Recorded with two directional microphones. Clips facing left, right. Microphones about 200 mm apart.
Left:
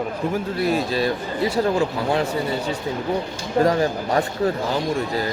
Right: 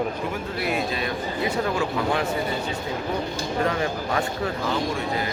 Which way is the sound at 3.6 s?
40° left (ahead or behind).